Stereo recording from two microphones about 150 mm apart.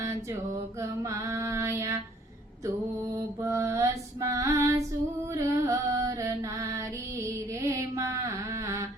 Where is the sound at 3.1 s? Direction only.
20° right (ahead or behind).